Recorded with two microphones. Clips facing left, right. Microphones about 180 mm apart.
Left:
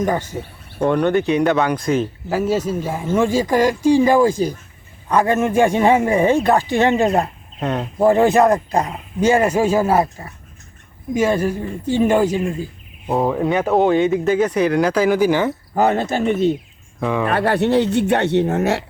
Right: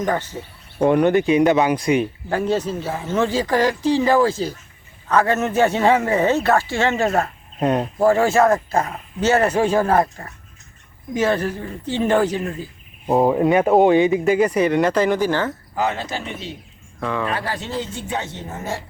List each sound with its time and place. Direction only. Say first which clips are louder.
0.0 s speech: left 2 dB; 10° left (ahead or behind)
0.8 s speech: right 1 dB; 10° right (ahead or behind); by 12.6 s 10° left (ahead or behind)
13.1 s speech: right 2 dB; 20° right (ahead or behind)
13.4 s speech: right 1 dB; centre (ahead or behind)
15.7 s speech: left 9 dB; 50° left (ahead or behind)
17.0 s speech: left 4 dB; 15° left (ahead or behind)
17.2 s speech: left 9 dB; 60° left (ahead or behind)